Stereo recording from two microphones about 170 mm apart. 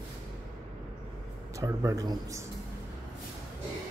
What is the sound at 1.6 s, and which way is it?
Speech, 20° right (ahead or behind).